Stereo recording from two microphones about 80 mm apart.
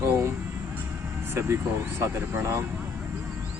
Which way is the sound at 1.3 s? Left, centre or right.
Right.